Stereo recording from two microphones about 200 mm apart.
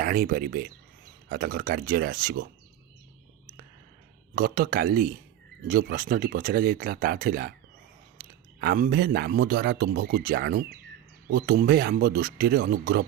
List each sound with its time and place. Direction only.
0.0 s speech: 50° right (ahead or behind)
4.4 s speech: 50° right (ahead or behind)